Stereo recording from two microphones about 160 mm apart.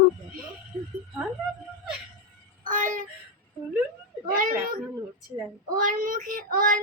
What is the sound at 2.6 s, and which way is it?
Music, 55° right (ahead or behind).